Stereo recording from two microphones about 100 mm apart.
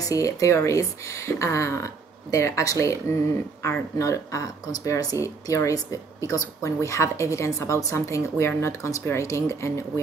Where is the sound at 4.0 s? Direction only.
35° left (ahead or behind).